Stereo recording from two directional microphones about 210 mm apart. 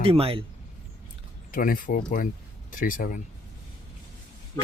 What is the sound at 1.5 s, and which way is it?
Speech, 40° left (ahead or behind).